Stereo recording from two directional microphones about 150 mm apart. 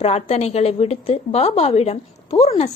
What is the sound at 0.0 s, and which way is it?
A woman's voice, 45° left (ahead or behind).